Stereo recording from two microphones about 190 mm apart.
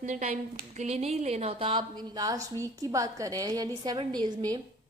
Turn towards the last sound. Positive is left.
turn(degrees=-20)  # may be behind; listen again after turning